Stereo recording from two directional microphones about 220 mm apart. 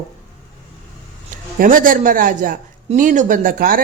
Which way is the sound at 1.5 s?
40° right (ahead or behind).